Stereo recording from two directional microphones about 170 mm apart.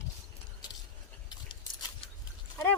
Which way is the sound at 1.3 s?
25° left (ahead or behind).